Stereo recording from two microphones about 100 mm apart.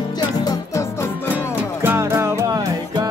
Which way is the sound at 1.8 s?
25° right (ahead or behind).